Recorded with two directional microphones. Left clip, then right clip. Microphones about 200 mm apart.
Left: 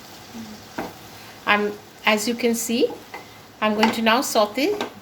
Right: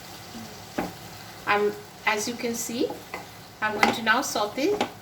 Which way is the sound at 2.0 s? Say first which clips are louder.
Left 6 dB; 55° left (ahead or behind).